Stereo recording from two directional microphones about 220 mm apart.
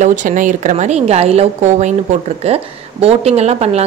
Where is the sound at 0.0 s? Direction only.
35° right (ahead or behind).